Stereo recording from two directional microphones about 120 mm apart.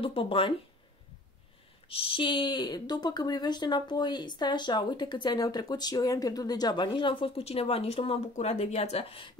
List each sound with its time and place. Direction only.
0.0 s speech: 50° left (ahead or behind)
1.9 s speech: 50° left (ahead or behind)